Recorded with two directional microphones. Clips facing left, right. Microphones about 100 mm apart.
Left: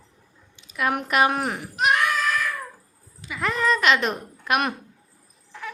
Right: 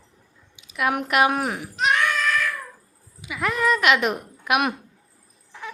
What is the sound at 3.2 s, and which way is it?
A woman's voice, 10° right (ahead or behind).